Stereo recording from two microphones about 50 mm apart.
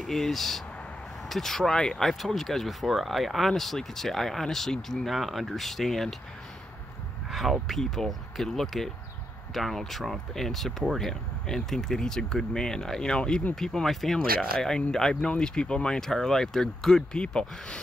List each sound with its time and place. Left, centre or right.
0.0 s speech: centre
7.2 s a sound: centre
7.6 s speech: centre